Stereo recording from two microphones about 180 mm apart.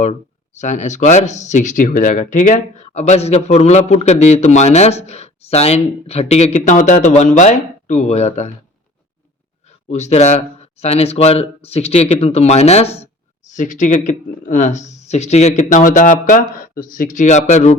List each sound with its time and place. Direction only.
0.0 s speech: 40° left (ahead or behind)
9.9 s speech: 40° left (ahead or behind)